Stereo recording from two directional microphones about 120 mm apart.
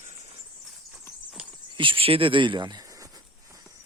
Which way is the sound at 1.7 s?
45° right (ahead or behind).